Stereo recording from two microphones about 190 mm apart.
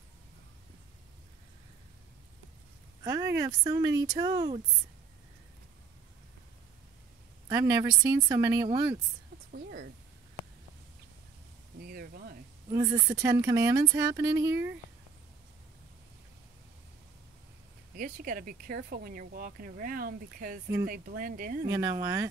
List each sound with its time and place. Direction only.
3.0 s speech: 15° right (ahead or behind)
7.4 s speech: 15° right (ahead or behind)
9.5 s speech: 55° right (ahead or behind)
11.8 s speech: 50° right (ahead or behind)
12.7 s speech: 20° right (ahead or behind)
17.9 s speech: 45° right (ahead or behind)
21.6 s speech: 15° right (ahead or behind)